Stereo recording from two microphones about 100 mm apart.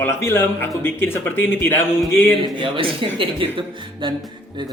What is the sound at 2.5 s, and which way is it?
Speech, 55° right (ahead or behind).